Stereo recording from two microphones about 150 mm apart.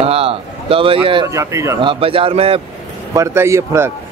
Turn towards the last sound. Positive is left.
turn(degrees=-20)  # may be behind; listen again after turning